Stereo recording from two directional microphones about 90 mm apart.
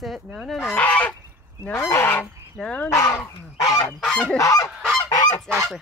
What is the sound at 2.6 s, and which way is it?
Goose, 10° left (ahead or behind).